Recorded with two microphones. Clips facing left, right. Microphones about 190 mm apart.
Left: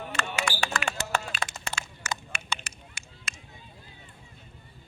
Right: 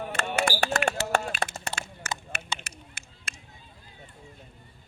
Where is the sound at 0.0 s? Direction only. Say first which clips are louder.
Right 4 dB; 55° right (ahead or behind).